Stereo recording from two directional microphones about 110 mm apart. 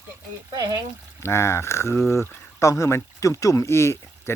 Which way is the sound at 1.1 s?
25° left (ahead or behind).